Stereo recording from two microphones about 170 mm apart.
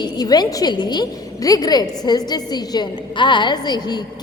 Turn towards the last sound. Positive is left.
turn(degrees=25)  # may be behind; listen again after turning